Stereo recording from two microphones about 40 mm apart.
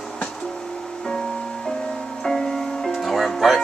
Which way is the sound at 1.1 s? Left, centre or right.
Centre.